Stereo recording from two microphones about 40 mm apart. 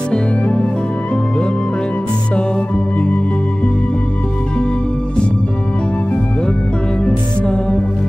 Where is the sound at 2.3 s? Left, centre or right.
Left.